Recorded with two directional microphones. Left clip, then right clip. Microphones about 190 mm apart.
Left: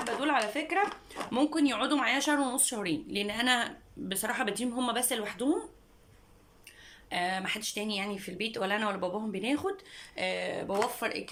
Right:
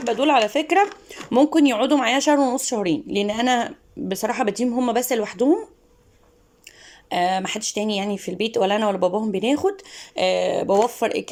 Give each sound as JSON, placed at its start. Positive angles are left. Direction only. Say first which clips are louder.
{"t": 0.2, "sound": "speech", "louder": "right 12 dB", "side_deg": -45}
{"t": 6.7, "sound": "speech", "louder": "right 10 dB", "side_deg": -40}